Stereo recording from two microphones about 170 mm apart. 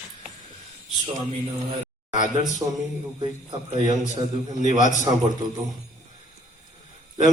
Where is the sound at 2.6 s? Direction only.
20° right (ahead or behind).